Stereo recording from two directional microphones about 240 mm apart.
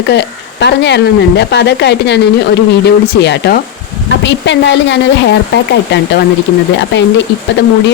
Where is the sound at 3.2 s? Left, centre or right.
Left.